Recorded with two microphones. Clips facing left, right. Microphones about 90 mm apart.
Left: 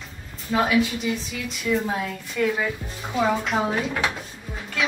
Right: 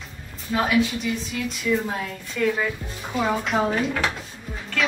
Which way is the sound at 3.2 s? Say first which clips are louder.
Even; centre (ahead or behind).